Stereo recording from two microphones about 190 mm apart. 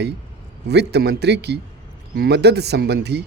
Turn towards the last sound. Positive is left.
turn(degrees=-60)  # may be behind; listen again after turning